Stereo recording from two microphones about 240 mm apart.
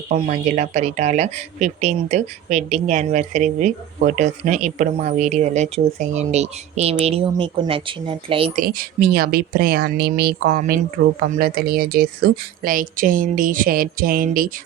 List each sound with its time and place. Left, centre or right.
0.1 s speech: right
8.6 s speech: right